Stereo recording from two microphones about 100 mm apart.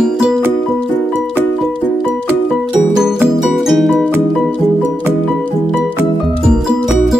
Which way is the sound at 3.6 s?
5° right (ahead or behind).